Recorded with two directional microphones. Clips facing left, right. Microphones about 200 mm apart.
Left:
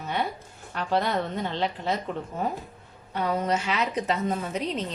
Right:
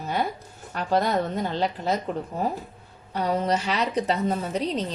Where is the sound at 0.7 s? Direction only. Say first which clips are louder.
Right 2 dB; 40° right (ahead or behind).